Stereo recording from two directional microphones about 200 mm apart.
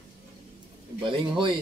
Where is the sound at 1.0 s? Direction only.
25° right (ahead or behind).